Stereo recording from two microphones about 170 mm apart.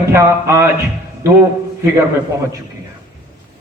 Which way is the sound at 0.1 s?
15° right (ahead or behind).